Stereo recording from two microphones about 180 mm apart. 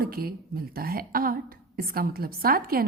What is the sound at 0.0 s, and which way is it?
A woman's voice, 55° right (ahead or behind).